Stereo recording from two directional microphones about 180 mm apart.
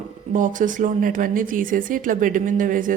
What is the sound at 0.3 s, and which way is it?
A woman's voice, 45° right (ahead or behind).